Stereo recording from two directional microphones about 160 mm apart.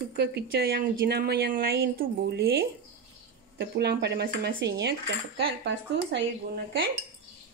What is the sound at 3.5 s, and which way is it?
Cutlery, 90° right.